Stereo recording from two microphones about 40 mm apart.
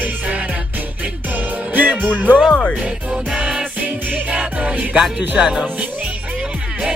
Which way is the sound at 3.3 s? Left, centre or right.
Right.